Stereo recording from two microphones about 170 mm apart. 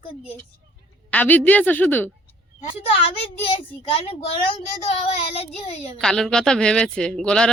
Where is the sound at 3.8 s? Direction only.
30° left (ahead or behind).